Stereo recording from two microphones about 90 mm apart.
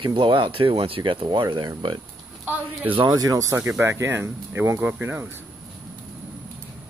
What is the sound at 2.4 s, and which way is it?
Speech, 20° right (ahead or behind).